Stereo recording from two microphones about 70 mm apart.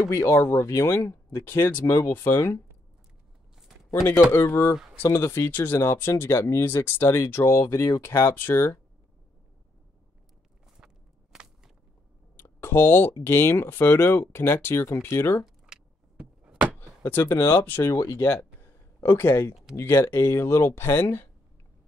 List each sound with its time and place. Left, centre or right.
0.0 s speech: left
3.9 s speech: left
4.3 s speech: left
11.3 s walk: centre
12.4 s speech: left
15.4 s a sound: centre
17.0 s speech: left
17.9 s speech: left
18.9 s speech: left